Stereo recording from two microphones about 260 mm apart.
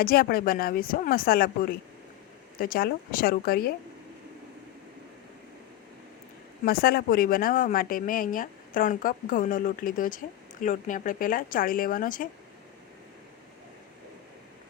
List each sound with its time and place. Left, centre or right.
0.0 s speech: left
6.7 s speech: left